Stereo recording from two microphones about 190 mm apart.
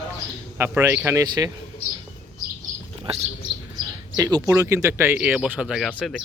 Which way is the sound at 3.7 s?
20° right (ahead or behind).